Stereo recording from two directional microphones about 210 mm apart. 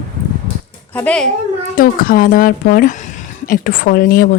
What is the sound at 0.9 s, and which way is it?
Speech, 5° left (ahead or behind).